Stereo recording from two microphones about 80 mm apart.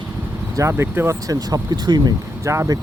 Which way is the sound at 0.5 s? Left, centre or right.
Right.